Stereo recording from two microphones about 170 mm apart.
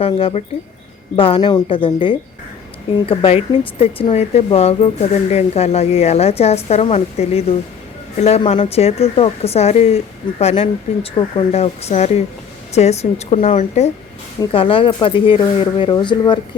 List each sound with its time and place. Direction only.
0.0 s a woman's voice: 35° left (ahead or behind)